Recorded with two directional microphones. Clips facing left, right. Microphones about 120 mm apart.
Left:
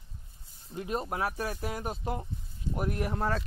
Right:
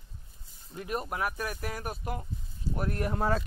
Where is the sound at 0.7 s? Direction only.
25° left (ahead or behind).